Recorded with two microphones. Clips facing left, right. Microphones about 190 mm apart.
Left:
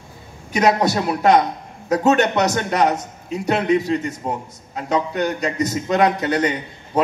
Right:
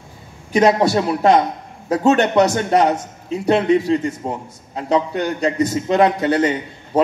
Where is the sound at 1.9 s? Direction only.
30° right (ahead or behind).